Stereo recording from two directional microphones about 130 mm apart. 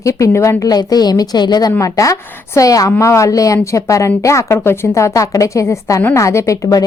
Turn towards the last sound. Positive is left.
turn(degrees=25)  # may be behind; listen again after turning